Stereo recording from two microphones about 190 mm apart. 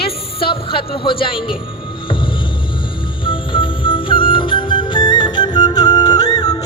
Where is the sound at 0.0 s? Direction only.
30° left (ahead or behind).